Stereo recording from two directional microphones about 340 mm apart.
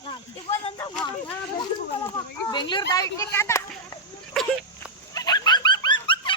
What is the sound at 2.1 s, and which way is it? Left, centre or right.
A child's voice, centre.